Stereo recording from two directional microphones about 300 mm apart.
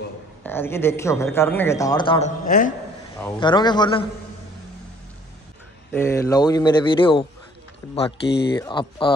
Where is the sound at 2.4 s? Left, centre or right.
Left.